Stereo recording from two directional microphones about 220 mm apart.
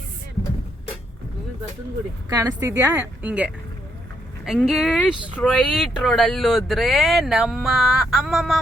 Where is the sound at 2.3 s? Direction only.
15° right (ahead or behind).